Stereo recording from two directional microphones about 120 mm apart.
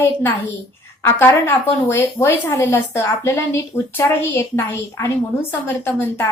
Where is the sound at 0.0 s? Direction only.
20° left (ahead or behind).